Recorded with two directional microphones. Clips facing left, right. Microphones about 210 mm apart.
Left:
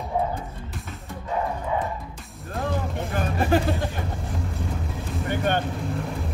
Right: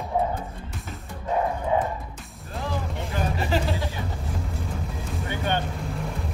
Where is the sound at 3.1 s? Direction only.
50° left (ahead or behind).